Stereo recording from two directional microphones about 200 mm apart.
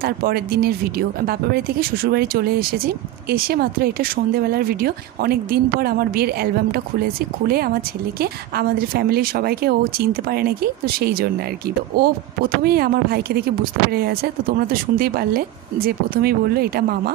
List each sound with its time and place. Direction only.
0.0 s speech: 50° right (ahead or behind)